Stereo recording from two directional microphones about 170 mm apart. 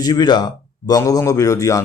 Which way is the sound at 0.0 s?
25° left (ahead or behind).